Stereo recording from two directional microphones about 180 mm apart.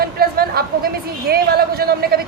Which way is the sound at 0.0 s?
55° right (ahead or behind).